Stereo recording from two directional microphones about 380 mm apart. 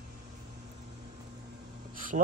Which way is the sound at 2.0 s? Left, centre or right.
Right.